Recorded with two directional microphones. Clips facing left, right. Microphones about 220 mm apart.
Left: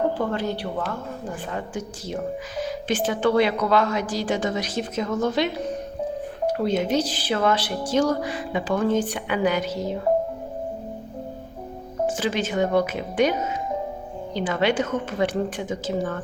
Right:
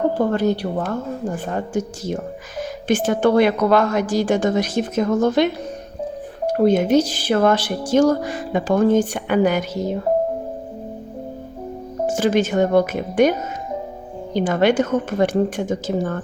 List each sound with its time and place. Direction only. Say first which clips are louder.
0.3 s speech: right 7 dB; 45° right (ahead or behind)
6.5 s speech: right 8 dB; 50° right (ahead or behind)
12.0 s speech: right 7 dB; 45° right (ahead or behind)
14.3 s speech: right 6 dB; 50° right (ahead or behind)